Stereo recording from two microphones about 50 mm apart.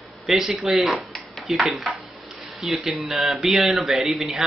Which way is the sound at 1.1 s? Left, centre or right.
Centre.